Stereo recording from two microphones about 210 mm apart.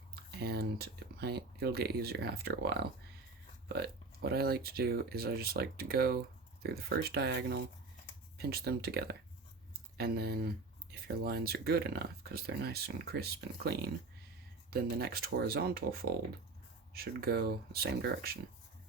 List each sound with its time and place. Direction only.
0.3 s speech: 50° right (ahead or behind)